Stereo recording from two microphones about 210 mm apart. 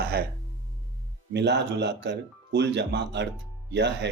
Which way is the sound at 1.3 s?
55° right (ahead or behind).